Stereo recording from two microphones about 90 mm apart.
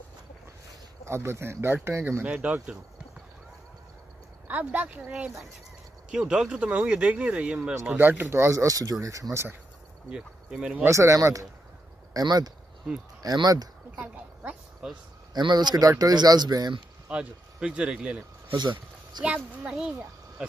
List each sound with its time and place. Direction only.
1.0 s speech: 30° right (ahead or behind)
2.2 s speech: 15° right (ahead or behind)
4.5 s speech: 15° right (ahead or behind)
8.0 s speech: 20° right (ahead or behind)
10.0 s speech: 10° right (ahead or behind)
10.9 s speech: 35° right (ahead or behind)
12.1 s speech: 45° right (ahead or behind)
13.9 s a woman's voice: 15° right (ahead or behind)
15.3 s speech: 50° right (ahead or behind)
17.1 s speech: 10° right (ahead or behind)
18.5 s speech: 60° right (ahead or behind)
19.2 s speech: 10° right (ahead or behind)